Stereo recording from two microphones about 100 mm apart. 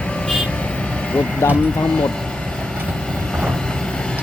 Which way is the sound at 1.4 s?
20° left (ahead or behind).